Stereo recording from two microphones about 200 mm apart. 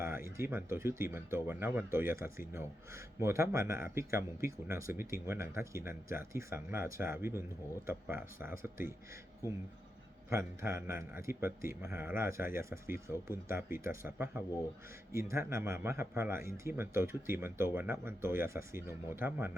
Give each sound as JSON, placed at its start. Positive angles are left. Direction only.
{"t": 0.3, "sound": "speech", "side_deg": -10}
{"t": 10.2, "sound": "speech", "side_deg": -10}